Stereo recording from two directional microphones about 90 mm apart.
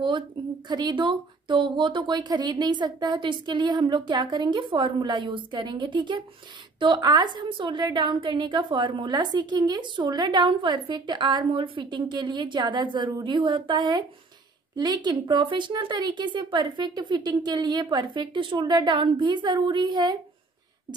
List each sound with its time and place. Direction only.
0.7 s a woman's voice: 55° right (ahead or behind)
18.6 s a woman's voice: 55° right (ahead or behind)